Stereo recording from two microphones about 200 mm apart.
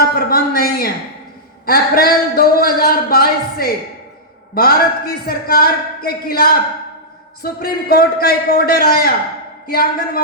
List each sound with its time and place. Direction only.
0.1 s a man's voice: 50° left (ahead or behind)